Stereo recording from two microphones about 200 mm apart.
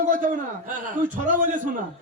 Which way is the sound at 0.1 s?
40° right (ahead or behind).